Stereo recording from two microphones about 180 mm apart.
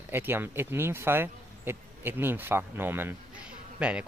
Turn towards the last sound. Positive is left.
turn(degrees=-5)  # may be behind; listen again after turning